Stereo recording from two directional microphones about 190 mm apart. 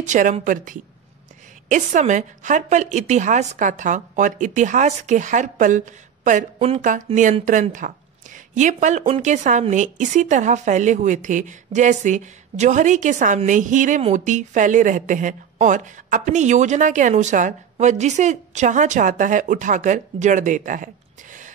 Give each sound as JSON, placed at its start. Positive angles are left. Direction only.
{"t": 0.0, "sound": "a woman's voice", "side_deg": -40}